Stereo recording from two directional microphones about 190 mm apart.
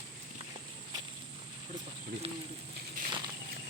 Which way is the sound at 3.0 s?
45° right (ahead or behind).